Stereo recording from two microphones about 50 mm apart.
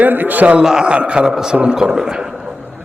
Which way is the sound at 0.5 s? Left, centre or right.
Centre.